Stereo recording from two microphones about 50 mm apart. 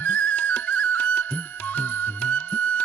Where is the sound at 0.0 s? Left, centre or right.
Left.